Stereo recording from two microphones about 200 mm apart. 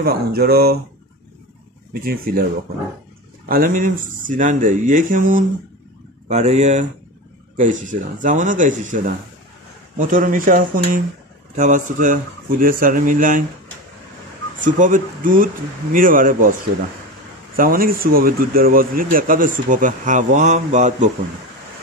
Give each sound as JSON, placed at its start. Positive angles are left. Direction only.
{"t": 0.0, "sound": "speech", "side_deg": -50}
{"t": 2.0, "sound": "speech", "side_deg": -50}
{"t": 3.4, "sound": "speech", "side_deg": -45}
{"t": 14.6, "sound": "speech", "side_deg": -40}
{"t": 17.6, "sound": "speech", "side_deg": -45}